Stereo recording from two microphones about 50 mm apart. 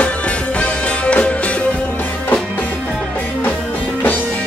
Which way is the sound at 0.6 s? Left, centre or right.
Left.